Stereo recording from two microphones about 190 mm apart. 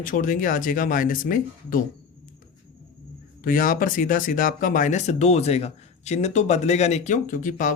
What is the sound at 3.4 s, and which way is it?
Speech, 45° left (ahead or behind).